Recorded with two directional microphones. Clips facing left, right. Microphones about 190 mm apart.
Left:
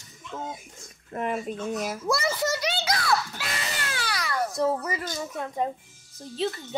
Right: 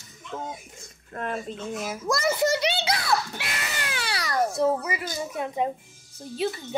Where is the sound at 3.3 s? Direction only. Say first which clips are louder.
Even; 25° right (ahead or behind).